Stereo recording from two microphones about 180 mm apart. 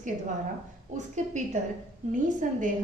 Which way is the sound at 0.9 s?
40° right (ahead or behind).